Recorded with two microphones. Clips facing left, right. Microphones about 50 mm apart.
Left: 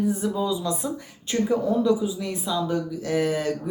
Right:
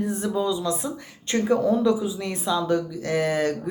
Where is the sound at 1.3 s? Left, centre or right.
Right.